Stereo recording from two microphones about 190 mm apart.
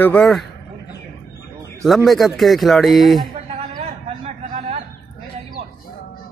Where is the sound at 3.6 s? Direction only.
35° right (ahead or behind).